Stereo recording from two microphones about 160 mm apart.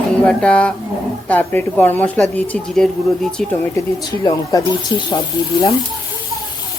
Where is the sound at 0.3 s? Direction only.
5° left (ahead or behind).